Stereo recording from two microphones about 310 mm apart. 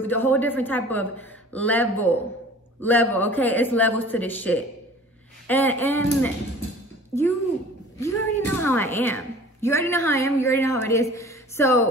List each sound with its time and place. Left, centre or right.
0.0 s a man's voice: centre
8.0 s speech: centre